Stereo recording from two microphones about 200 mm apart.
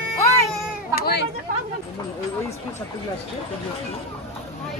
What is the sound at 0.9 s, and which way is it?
Speech, 50° left (ahead or behind).